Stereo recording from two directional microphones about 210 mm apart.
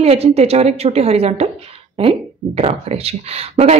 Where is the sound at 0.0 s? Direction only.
30° right (ahead or behind).